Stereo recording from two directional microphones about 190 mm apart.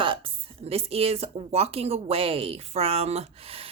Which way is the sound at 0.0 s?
25° right (ahead or behind).